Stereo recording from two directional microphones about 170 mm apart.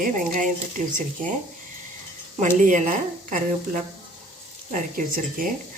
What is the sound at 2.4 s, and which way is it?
A woman's voice, 50° right (ahead or behind).